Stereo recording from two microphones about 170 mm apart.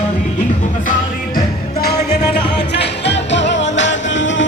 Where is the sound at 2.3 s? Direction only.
80° left.